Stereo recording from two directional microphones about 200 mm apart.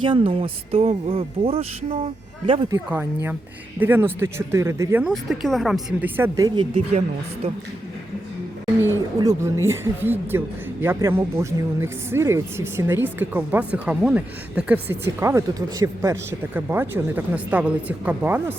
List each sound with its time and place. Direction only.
0.0 s speech: 25° right (ahead or behind)
2.7 s a woman's voice: 10° right (ahead or behind)
9.1 s a woman's voice: 15° right (ahead or behind)